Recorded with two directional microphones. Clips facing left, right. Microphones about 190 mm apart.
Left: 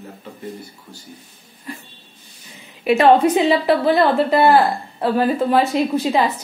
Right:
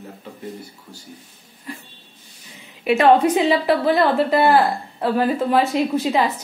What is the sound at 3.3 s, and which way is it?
A woman's voice, 30° left (ahead or behind).